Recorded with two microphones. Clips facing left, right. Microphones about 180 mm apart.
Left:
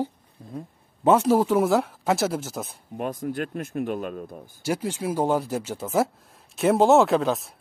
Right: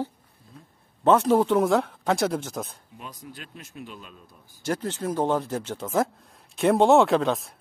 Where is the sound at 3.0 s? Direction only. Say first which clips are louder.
Left 14 dB; 55° left (ahead or behind).